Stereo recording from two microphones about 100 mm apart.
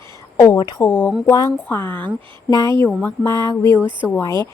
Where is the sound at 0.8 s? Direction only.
20° left (ahead or behind).